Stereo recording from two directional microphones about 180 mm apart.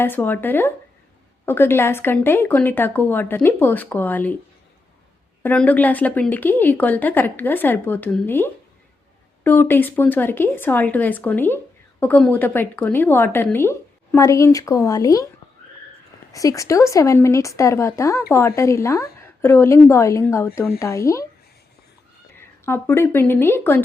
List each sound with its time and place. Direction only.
0.0 s speech: 10° left (ahead or behind)
5.4 s speech: 10° left (ahead or behind)
16.3 s speech: 20° left (ahead or behind)
22.4 s speech: 15° left (ahead or behind)